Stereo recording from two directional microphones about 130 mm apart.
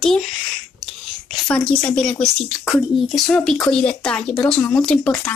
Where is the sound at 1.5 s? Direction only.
10° left (ahead or behind).